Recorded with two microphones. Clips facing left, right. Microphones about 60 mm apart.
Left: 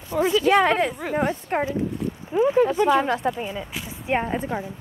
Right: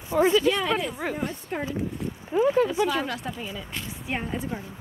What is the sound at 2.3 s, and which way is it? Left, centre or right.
Speech, centre.